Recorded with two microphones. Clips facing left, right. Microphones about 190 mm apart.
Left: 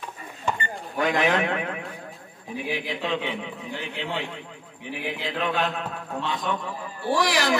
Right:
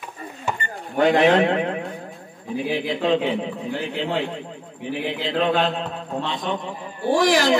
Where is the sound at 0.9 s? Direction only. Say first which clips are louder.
Right 7 dB; 35° right (ahead or behind).